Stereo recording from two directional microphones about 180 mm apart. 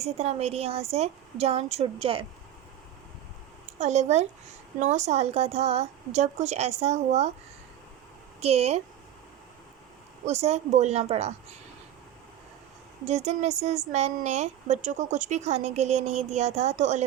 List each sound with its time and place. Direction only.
0.0 s a woman's voice: 35° right (ahead or behind)
3.8 s a woman's voice: 40° right (ahead or behind)
8.4 s a woman's voice: 35° right (ahead or behind)
10.2 s a woman's voice: 35° right (ahead or behind)
13.1 s a woman's voice: 40° right (ahead or behind)